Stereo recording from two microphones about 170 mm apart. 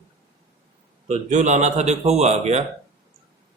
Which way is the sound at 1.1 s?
45° right (ahead or behind).